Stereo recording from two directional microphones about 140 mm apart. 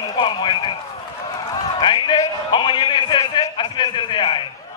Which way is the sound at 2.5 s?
35° left (ahead or behind).